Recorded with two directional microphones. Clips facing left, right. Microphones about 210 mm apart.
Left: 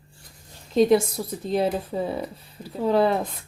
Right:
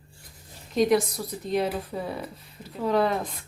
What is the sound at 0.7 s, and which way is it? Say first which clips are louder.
Speech: left 4 dB; 25° left (ahead or behind).